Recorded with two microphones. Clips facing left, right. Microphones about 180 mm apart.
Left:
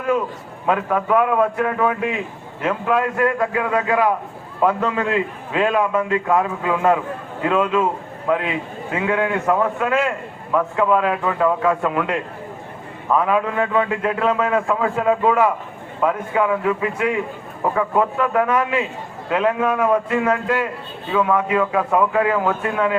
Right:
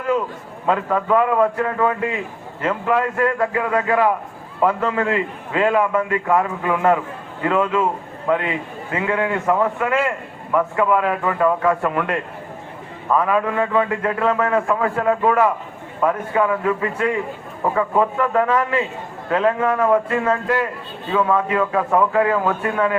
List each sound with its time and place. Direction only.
0.7 s a man's voice: 15° left (ahead or behind)
17.6 s a man's voice: centre (ahead or behind)
18.2 s a man's voice: 15° left (ahead or behind)